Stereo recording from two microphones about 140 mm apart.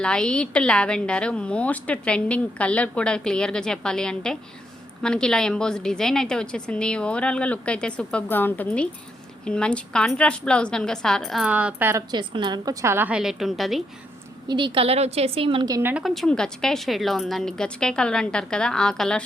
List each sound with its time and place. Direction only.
0.0 s a woman's voice: 5° left (ahead or behind); by 12.0 s 15° right (ahead or behind)
12.1 s a woman's voice: 35° right (ahead or behind)
12.8 s a woman's voice: 15° right (ahead or behind)
14.4 s a woman's voice: 35° right (ahead or behind)
15.7 s a woman's voice: 15° right (ahead or behind)
16.0 s a woman's voice: centre (ahead or behind)